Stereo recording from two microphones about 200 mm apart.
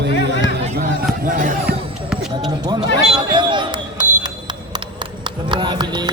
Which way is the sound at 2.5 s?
20° right (ahead or behind).